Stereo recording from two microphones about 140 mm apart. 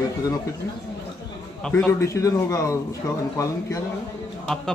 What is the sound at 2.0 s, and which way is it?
Speech, 20° left (ahead or behind).